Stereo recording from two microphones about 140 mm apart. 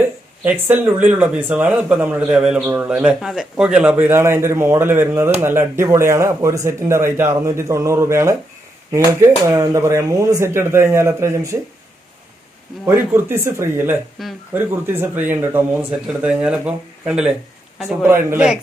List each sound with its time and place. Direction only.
0.4 s speech: 10° right (ahead or behind)
2.6 s speech: 15° right (ahead or behind)
12.8 s speech: 15° right (ahead or behind)
17.8 s speech: 20° right (ahead or behind)
18.3 s a man's voice: 5° right (ahead or behind)